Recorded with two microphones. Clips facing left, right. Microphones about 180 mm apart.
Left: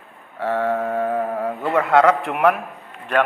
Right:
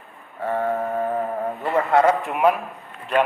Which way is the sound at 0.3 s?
85° left.